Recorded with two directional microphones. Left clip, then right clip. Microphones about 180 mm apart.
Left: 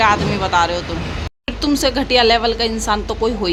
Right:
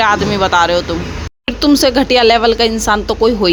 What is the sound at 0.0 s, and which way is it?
A woman's voice, 35° right (ahead or behind).